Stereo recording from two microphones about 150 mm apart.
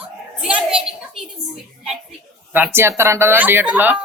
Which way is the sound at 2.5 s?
15° right (ahead or behind).